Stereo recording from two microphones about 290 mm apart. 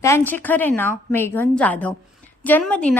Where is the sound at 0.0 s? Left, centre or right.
Centre.